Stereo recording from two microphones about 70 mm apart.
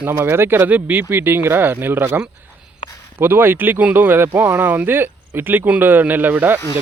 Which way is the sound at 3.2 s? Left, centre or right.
Right.